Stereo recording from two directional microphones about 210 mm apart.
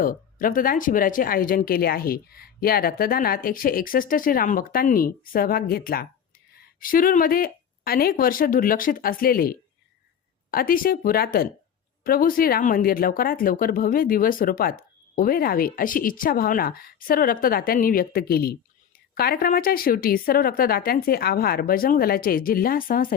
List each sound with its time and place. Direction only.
0.0 s speech: 40° left (ahead or behind)